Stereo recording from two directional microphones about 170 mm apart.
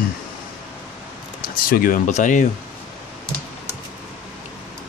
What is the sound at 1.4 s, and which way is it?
Speech, 55° left (ahead or behind).